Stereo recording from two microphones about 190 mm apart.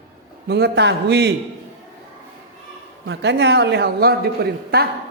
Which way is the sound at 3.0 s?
70° right (ahead or behind).